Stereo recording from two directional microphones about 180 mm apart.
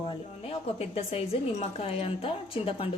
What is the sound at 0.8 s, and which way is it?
A woman's voice, 35° left (ahead or behind).